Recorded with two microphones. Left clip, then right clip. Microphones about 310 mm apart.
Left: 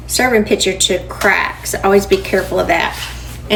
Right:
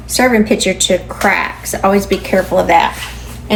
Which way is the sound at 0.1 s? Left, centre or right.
Centre.